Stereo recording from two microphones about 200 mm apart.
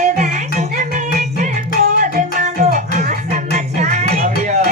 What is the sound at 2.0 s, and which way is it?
Music, 40° right (ahead or behind).